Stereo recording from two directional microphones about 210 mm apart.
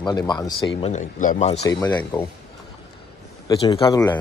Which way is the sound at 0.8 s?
35° left (ahead or behind).